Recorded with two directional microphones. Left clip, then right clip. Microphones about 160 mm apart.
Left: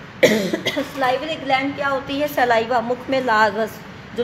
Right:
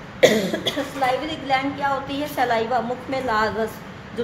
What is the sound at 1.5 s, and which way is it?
A woman's voice, 45° left (ahead or behind).